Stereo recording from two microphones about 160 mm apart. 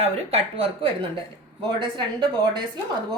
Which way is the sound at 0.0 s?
40° right (ahead or behind).